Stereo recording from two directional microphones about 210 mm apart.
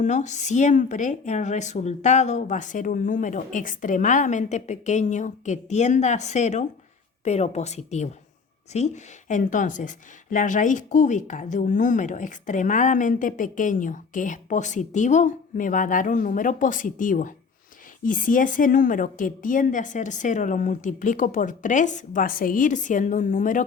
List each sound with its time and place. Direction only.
0.0 s a woman's voice: 35° left (ahead or behind)